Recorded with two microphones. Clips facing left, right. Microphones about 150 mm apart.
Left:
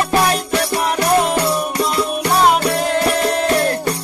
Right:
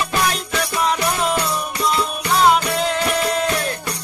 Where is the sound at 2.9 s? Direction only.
50° left (ahead or behind).